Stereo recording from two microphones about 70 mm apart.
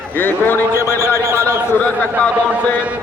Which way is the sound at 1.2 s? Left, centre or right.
Right.